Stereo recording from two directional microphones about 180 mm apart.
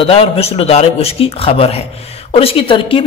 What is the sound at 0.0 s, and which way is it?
A man's voice, 30° left (ahead or behind).